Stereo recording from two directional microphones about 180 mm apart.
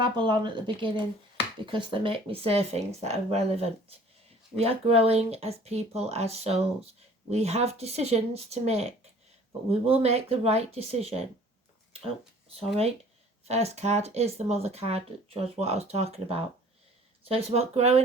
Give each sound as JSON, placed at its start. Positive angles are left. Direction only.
{"t": 0.0, "sound": "speech", "side_deg": -25}